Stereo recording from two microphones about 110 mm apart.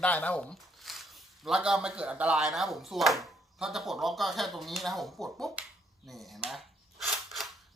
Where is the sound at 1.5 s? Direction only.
5° right (ahead or behind).